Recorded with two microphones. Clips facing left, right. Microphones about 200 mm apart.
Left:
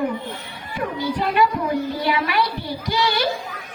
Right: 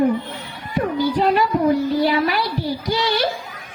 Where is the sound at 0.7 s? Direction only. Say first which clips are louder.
Right 5 dB; 40° right (ahead or behind).